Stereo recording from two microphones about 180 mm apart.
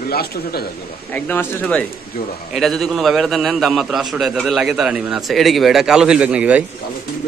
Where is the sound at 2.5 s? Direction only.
Centre (ahead or behind).